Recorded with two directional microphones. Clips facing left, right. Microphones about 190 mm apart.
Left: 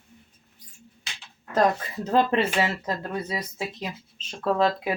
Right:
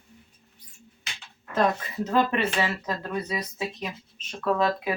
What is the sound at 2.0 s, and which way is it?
Speech, 30° left (ahead or behind).